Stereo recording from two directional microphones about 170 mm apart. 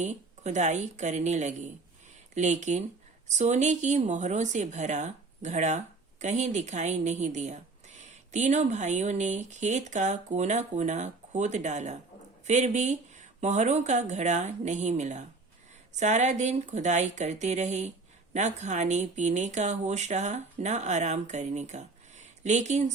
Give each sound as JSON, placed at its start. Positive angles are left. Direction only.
{"t": 0.0, "sound": "speech", "side_deg": -45}